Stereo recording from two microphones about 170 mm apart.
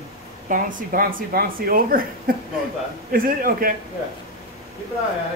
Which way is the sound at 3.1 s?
60° right (ahead or behind).